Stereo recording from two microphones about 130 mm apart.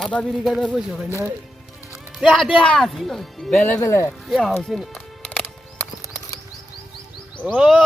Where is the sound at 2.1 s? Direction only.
Centre (ahead or behind).